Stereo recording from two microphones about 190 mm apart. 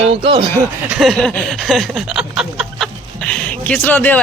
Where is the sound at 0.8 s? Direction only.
5° right (ahead or behind).